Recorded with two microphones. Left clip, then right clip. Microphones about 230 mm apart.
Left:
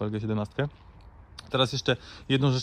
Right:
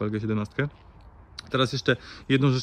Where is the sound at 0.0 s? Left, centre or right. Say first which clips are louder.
Right 2 dB; centre.